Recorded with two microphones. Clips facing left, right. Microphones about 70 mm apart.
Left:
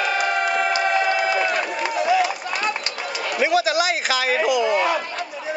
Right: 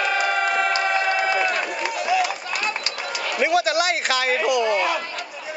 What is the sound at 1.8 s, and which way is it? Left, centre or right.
Run, left.